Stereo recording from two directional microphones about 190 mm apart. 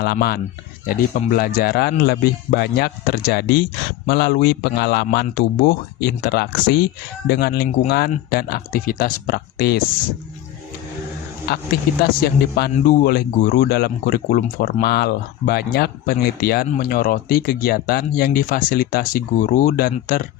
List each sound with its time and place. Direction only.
0.0 s speech: 55° left (ahead or behind)
1.4 s a man's voice: 50° left (ahead or behind)
11.5 s a man's voice: 50° left (ahead or behind)